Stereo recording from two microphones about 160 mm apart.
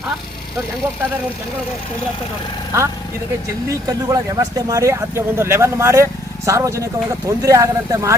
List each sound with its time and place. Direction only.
3.8 s speech: 20° right (ahead or behind)